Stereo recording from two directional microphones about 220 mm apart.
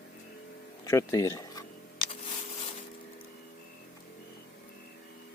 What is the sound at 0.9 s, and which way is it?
Speech, 15° left (ahead or behind).